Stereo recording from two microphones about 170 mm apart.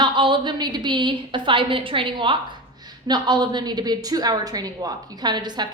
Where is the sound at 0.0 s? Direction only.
25° right (ahead or behind).